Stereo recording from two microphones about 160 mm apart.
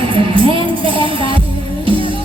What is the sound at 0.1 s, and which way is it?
Music, 30° right (ahead or behind).